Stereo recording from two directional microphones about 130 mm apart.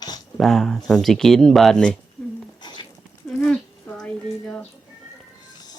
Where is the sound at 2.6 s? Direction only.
35° left (ahead or behind).